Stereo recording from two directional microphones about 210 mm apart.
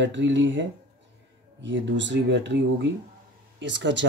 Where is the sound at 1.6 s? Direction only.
60° right (ahead or behind).